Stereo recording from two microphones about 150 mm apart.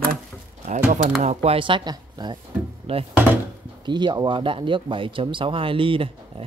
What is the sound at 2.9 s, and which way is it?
Speech, 40° right (ahead or behind).